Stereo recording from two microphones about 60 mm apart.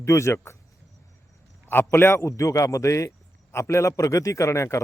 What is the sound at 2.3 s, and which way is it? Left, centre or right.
A man's voice, left.